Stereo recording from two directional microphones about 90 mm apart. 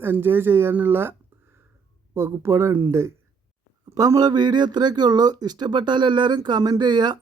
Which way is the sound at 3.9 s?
45° right (ahead or behind).